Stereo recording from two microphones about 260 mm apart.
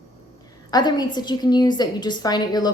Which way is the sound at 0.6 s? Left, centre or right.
Centre.